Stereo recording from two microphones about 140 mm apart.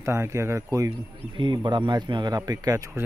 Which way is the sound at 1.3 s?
35° right (ahead or behind).